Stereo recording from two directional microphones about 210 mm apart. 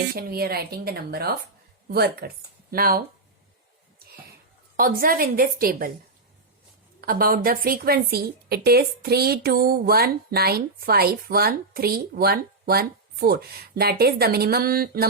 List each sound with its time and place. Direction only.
0.2 s a woman's voice: 45° right (ahead or behind)
4.8 s a woman's voice: 45° right (ahead or behind)
7.0 s a woman's voice: 45° right (ahead or behind)